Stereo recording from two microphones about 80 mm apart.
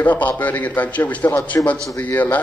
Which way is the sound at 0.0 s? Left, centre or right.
Centre.